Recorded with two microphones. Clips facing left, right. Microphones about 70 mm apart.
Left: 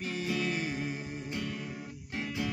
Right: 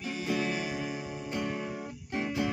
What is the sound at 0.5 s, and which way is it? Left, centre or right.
Music, left.